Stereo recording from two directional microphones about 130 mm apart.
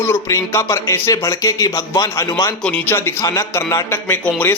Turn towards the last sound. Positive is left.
turn(degrees=15)  # may be behind; listen again after turning